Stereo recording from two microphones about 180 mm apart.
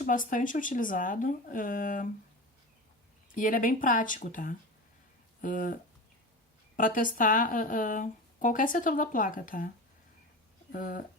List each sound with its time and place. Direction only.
0.0 s speech: 50° left (ahead or behind)
3.3 s speech: 50° left (ahead or behind)
10.7 s speech: 50° left (ahead or behind)